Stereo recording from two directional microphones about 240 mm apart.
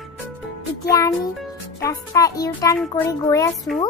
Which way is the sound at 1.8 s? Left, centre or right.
Centre.